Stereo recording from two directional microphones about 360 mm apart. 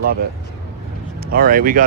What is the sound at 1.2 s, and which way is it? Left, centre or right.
Speech, right.